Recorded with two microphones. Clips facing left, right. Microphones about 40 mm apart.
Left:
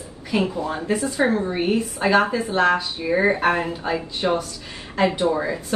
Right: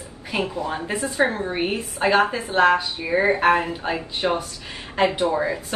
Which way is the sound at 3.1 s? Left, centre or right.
Centre.